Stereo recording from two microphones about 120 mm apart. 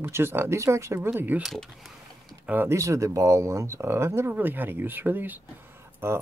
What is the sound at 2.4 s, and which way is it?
Speech, 20° right (ahead or behind).